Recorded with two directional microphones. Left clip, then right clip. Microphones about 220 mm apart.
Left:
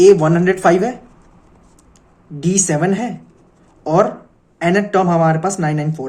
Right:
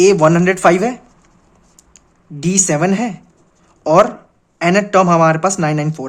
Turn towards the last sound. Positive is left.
turn(degrees=-35)  # may be behind; listen again after turning